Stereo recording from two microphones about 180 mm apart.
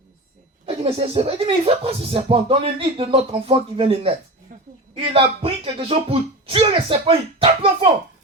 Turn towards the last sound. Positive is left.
turn(degrees=-30)  # may be behind; listen again after turning